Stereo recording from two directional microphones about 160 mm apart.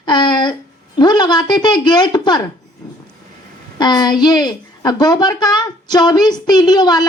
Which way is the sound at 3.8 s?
25° left (ahead or behind).